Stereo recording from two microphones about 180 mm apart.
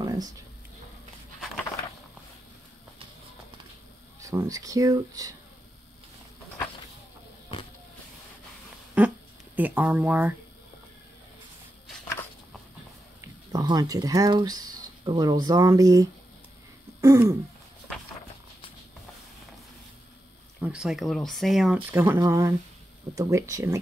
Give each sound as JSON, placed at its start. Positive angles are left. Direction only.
{"t": 0.0, "sound": "a sound", "side_deg": -20}
{"t": 4.2, "sound": "speech", "side_deg": -15}
{"t": 9.6, "sound": "speech", "side_deg": -10}
{"t": 13.2, "sound": "speech", "side_deg": -20}
{"t": 20.6, "sound": "speech", "side_deg": -5}
{"t": 21.9, "sound": "speech", "side_deg": -10}